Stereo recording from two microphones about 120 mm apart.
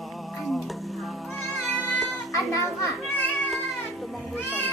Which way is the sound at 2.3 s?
25° left (ahead or behind).